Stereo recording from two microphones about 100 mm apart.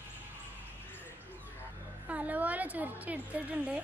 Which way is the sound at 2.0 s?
15° right (ahead or behind).